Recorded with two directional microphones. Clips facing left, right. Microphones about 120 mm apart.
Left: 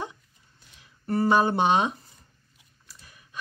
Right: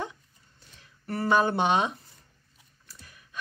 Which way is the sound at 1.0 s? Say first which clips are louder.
Left 3 dB; 25° left (ahead or behind).